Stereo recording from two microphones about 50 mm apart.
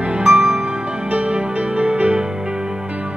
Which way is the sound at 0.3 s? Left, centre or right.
Centre.